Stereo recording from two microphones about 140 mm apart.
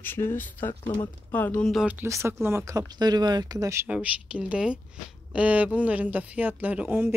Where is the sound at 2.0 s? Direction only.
15° right (ahead or behind).